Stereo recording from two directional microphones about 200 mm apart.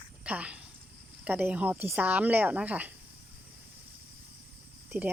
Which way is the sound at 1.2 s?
5° right (ahead or behind).